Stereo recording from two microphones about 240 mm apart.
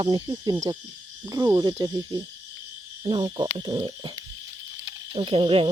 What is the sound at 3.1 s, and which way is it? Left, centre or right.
Speech, right.